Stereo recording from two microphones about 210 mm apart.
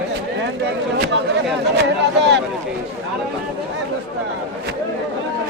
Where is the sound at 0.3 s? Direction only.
55° right (ahead or behind).